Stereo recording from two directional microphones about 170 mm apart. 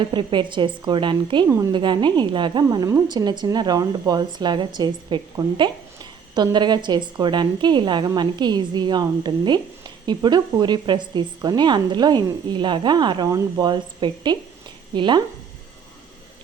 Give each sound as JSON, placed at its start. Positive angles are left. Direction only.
{"t": 0.1, "sound": "a woman's voice", "side_deg": -30}